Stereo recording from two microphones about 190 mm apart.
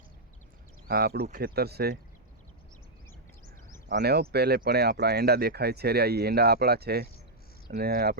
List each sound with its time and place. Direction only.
0.9 s speech: 55° right (ahead or behind)
3.8 s speech: 60° right (ahead or behind)